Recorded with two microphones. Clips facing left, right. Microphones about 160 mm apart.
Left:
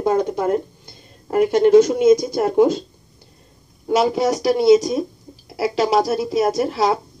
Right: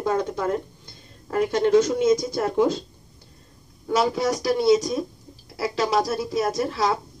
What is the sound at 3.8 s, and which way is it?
Speech, 25° left (ahead or behind).